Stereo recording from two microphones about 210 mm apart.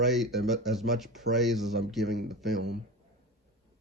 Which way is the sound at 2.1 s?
50° right (ahead or behind).